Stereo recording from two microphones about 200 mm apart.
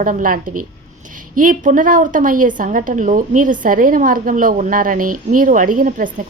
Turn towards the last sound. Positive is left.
turn(degrees=-40)  # may be behind; listen again after turning